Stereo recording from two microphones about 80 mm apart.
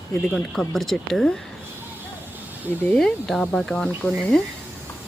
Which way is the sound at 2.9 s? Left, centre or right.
Centre.